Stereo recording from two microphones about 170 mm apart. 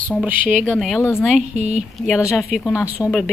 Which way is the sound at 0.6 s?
5° left (ahead or behind).